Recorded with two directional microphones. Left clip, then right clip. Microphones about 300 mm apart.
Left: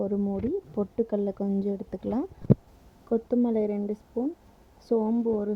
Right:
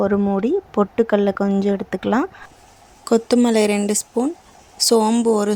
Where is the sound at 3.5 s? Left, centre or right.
Left.